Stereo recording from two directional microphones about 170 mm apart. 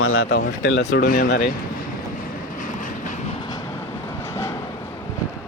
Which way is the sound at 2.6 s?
50° left (ahead or behind).